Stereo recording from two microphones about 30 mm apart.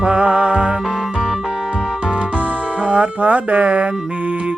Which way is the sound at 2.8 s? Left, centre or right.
Right.